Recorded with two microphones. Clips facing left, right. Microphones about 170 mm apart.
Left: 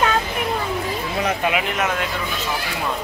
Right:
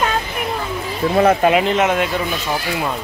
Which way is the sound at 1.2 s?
45° right (ahead or behind).